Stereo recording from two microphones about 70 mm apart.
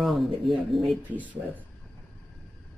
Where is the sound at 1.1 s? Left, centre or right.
Right.